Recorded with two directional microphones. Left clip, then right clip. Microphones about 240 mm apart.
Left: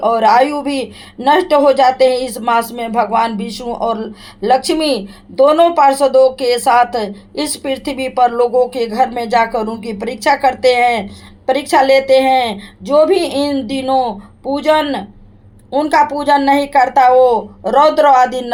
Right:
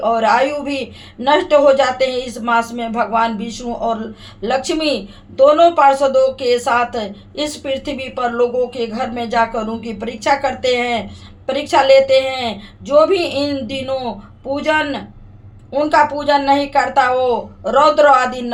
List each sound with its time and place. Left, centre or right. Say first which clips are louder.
0.0 s a woman's voice: left 3 dB; left